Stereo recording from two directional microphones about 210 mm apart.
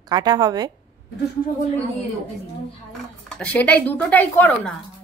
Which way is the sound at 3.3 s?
5° left (ahead or behind).